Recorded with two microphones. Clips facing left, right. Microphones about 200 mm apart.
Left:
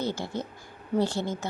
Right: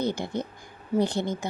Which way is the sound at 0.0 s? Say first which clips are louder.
Right 3 dB; 15° right (ahead or behind).